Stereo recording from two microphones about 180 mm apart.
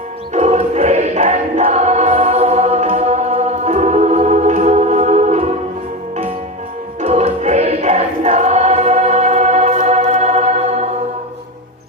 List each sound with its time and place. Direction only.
0.3 s choir: 40° right (ahead or behind)
7.0 s choir: 35° right (ahead or behind)